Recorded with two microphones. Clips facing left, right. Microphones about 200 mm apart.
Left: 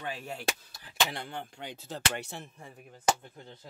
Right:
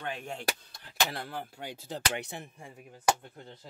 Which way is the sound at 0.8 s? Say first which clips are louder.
Even; 5° right (ahead or behind).